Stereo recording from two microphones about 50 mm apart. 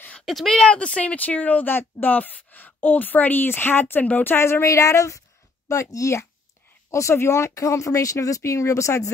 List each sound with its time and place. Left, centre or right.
0.2 s a sound: centre
0.5 s speech: left
4.4 s speech: left
6.9 s speech: left